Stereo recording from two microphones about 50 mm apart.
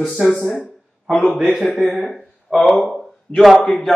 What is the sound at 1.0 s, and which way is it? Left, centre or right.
A man's voice, centre.